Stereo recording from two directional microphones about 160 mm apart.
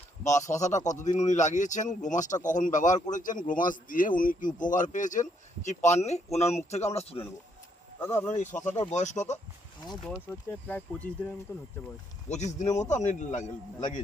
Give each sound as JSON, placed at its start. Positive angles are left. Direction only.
{"t": 0.3, "sound": "speech", "side_deg": 50}
{"t": 8.0, "sound": "speech", "side_deg": 15}
{"t": 8.3, "sound": "speech", "side_deg": 50}
{"t": 10.7, "sound": "speech", "side_deg": 10}
{"t": 12.3, "sound": "speech", "side_deg": 45}